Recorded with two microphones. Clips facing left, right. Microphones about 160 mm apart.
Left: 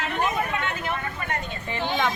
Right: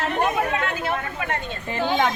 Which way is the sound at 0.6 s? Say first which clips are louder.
Right 3 dB; 40° right (ahead or behind).